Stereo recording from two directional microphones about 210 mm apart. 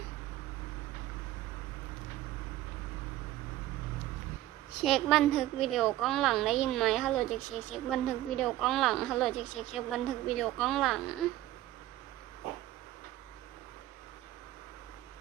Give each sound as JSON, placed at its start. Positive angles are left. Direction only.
{"t": 4.8, "sound": "a woman's voice", "side_deg": 0}